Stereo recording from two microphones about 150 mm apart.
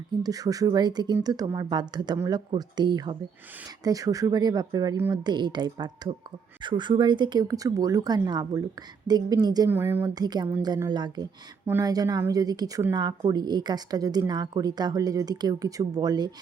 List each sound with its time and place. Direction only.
0.2 s a woman's voice: 25° right (ahead or behind)
9.6 s a woman's voice: 15° right (ahead or behind)
10.2 s a woman's voice: 30° right (ahead or behind)